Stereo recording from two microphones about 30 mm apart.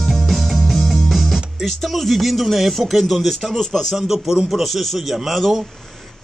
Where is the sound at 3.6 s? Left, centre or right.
Centre.